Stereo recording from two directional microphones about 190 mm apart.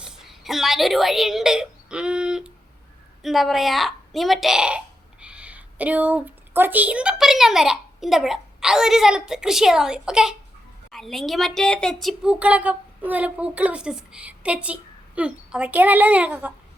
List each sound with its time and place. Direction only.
0.0 s a woman's voice: 5° right (ahead or behind)